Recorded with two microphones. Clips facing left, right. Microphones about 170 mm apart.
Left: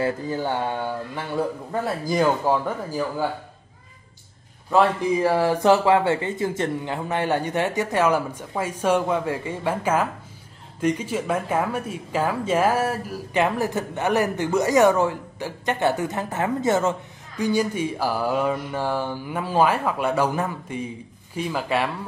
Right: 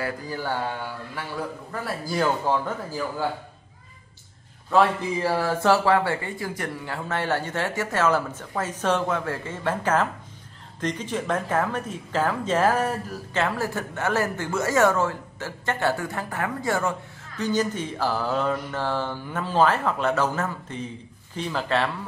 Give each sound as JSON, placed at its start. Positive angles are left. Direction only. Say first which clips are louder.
{"t": 0.0, "sound": "speech", "louder": "left 5 dB", "side_deg": 25}
{"t": 5.2, "sound": "speech", "louder": "left 3 dB", "side_deg": 15}
{"t": 17.4, "sound": "speech", "louder": "left 3 dB", "side_deg": 10}